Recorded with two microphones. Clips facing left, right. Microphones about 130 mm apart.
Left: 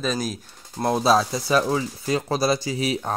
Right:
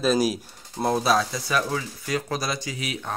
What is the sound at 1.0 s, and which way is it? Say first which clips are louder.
Speech: left 3 dB; 25° left (ahead or behind).